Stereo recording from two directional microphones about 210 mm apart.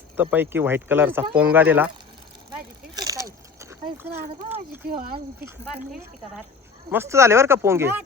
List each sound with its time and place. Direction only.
0.2 s speech: 10° right (ahead or behind)
2.9 s a sound: 15° right (ahead or behind)
4.8 s speech: 45° right (ahead or behind)
5.5 s speech: 10° right (ahead or behind)